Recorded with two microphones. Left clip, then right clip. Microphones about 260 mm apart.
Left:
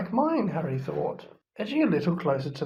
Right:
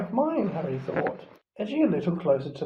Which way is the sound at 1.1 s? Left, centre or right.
Left.